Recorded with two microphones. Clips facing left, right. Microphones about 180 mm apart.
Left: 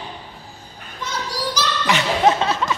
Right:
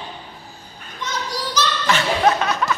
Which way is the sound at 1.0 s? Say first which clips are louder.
Left 1 dB; 10° left (ahead or behind).